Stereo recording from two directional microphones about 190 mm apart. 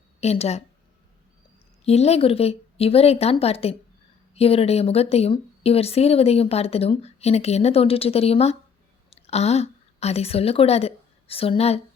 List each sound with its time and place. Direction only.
0.2 s a woman's voice: 35° left (ahead or behind)
1.8 s a woman's voice: 35° left (ahead or behind)